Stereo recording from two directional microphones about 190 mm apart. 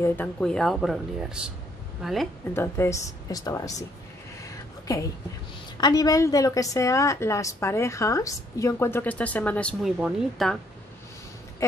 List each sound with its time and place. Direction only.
0.0 s speech: 10° left (ahead or behind)
2.5 s a woman's voice: 15° left (ahead or behind)
4.4 s a sound: 15° left (ahead or behind)
5.8 s a woman's voice: 20° left (ahead or behind); by 10.6 s centre (ahead or behind)